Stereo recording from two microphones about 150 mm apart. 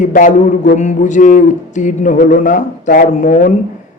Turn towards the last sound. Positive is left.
turn(degrees=60)  # may be behind; listen again after turning